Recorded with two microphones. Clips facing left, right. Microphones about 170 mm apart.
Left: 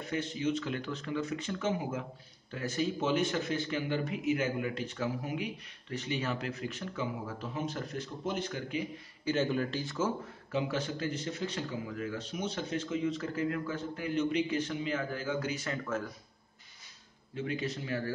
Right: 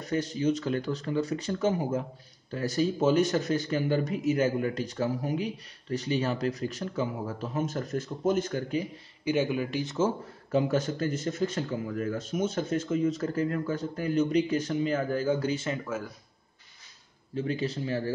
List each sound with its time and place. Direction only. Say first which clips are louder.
0.0 s speech: right 5 dB; 40° right (ahead or behind)
9.2 s speech: right 3 dB; 10° right (ahead or behind)
10.5 s a man's voice: right 7 dB; 45° right (ahead or behind); by 15.8 s 25° right (ahead or behind)
15.8 s speech: right 1 dB; 5° right (ahead or behind)
17.4 s speech: right 5 dB; 35° right (ahead or behind)